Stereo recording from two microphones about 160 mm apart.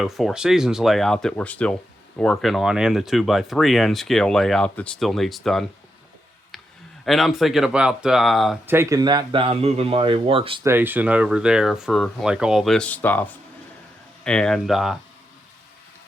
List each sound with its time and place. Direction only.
0.0 s speech: centre (ahead or behind)
7.0 s speech: centre (ahead or behind)
8.6 s speech: 15° right (ahead or behind); by 10.6 s 35° right (ahead or behind)
10.6 s speech: 15° right (ahead or behind)